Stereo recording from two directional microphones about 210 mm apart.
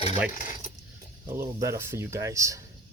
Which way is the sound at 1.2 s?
15° right (ahead or behind).